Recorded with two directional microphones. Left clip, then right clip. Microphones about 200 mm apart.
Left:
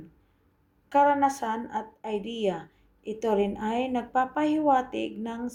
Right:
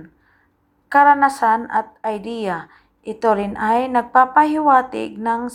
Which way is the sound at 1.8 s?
30° right (ahead or behind).